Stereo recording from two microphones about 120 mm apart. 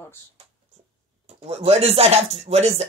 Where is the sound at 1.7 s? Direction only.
60° right (ahead or behind).